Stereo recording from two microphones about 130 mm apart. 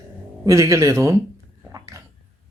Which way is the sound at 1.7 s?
25° right (ahead or behind).